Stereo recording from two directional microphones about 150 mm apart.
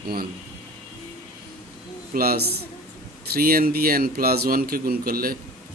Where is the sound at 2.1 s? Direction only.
85° right.